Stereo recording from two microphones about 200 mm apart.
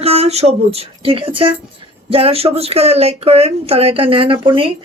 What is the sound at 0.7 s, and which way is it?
A woman's voice, 30° right (ahead or behind).